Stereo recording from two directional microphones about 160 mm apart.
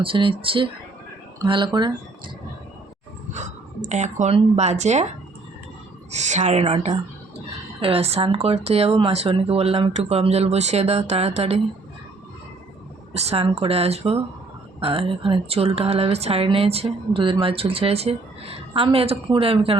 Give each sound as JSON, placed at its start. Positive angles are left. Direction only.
{"t": 0.0, "sound": "speech", "side_deg": -35}
{"t": 3.3, "sound": "speech", "side_deg": -50}
{"t": 6.1, "sound": "a woman's voice", "side_deg": -45}
{"t": 13.1, "sound": "speech", "side_deg": -40}